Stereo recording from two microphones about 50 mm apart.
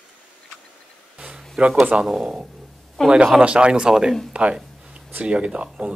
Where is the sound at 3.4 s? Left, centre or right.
Right.